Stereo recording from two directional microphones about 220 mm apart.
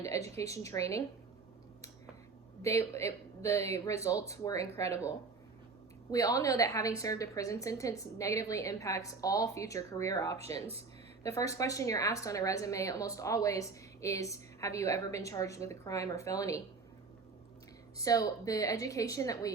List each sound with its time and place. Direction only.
0.1 s a sound: 15° left (ahead or behind)
0.5 s speech: 15° left (ahead or behind)
2.6 s speech: 15° left (ahead or behind)
17.9 s speech: 15° left (ahead or behind)